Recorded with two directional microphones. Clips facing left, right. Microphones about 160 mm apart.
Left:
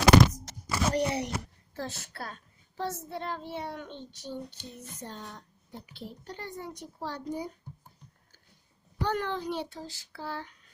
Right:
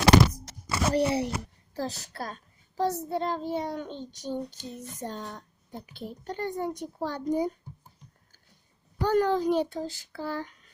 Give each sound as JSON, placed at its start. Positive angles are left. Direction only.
{"t": 0.9, "sound": "a child's voice", "side_deg": -30}
{"t": 9.0, "sound": "a child's voice", "side_deg": -40}